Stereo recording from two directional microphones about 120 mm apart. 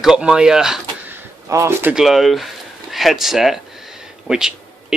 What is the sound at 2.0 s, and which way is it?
Speech, centre (ahead or behind).